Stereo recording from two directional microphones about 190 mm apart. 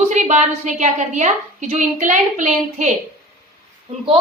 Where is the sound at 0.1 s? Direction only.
35° right (ahead or behind).